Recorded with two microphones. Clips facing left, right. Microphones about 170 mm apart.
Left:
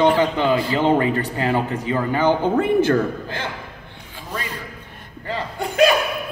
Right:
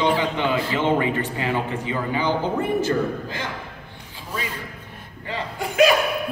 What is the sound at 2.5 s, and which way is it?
Speech, 60° left (ahead or behind).